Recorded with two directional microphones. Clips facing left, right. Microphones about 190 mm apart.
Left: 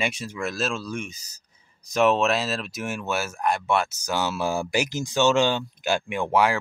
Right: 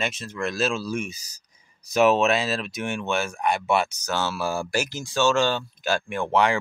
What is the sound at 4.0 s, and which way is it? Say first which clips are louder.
Speech: left 1 dB; 15° left (ahead or behind).